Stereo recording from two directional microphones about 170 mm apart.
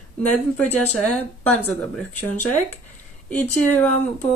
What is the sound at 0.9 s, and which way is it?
Speech, 5° left (ahead or behind).